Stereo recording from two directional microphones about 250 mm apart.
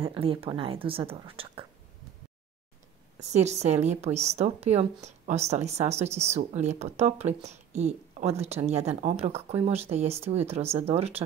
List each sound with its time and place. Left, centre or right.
0.0 s speech: right
3.2 s speech: right